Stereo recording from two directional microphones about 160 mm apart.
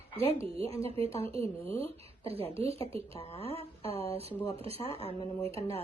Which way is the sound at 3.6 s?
40° right (ahead or behind).